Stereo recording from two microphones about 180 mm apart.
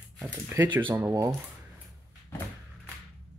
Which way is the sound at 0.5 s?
15° right (ahead or behind).